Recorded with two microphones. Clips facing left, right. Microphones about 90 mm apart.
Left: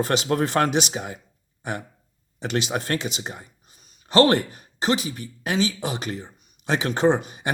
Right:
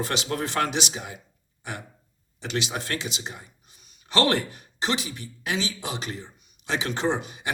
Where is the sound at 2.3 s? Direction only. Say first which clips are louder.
Left 4 dB; 50° left (ahead or behind).